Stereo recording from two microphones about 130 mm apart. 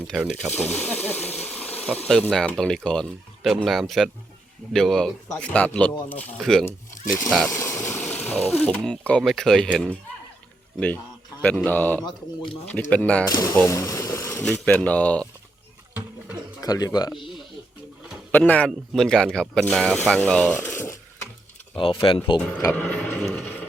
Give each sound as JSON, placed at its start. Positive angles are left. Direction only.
{"t": 0.5, "sound": "speech", "side_deg": 15}
{"t": 7.4, "sound": "speech", "side_deg": 25}
{"t": 13.2, "sound": "speech", "side_deg": 25}
{"t": 14.4, "sound": "speech", "side_deg": 10}
{"t": 16.6, "sound": "speech", "side_deg": 30}
{"t": 18.3, "sound": "speech", "side_deg": 15}
{"t": 22.0, "sound": "speech", "side_deg": 40}
{"t": 22.7, "sound": "a sound", "side_deg": 5}